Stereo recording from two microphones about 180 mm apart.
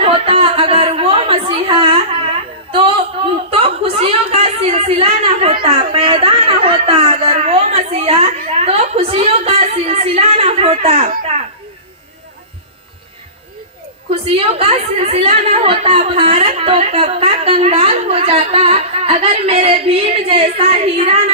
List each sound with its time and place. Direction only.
0.0 s a sound: 30° right (ahead or behind)
5.9 s a woman's voice: 30° right (ahead or behind)
14.1 s a woman's voice: 30° right (ahead or behind)